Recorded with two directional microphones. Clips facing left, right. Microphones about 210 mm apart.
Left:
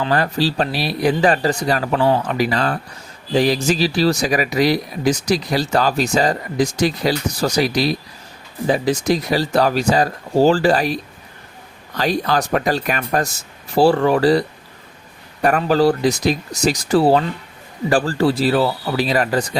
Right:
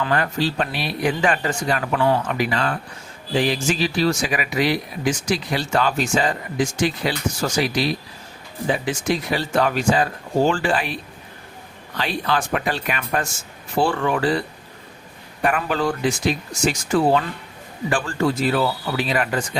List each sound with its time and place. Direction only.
0.0 s speech: 35° left (ahead or behind)